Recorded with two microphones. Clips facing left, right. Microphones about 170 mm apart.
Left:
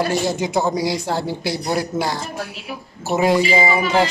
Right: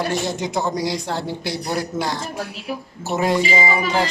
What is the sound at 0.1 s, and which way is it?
A man's voice, 5° left (ahead or behind).